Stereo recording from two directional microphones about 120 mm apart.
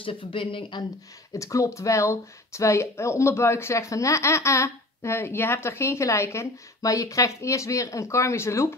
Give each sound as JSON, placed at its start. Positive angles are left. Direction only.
{"t": 0.0, "sound": "speech", "side_deg": 45}
{"t": 1.3, "sound": "speech", "side_deg": 25}